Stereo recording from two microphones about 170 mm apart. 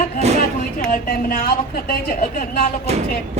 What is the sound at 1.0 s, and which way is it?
Speech, 55° left (ahead or behind).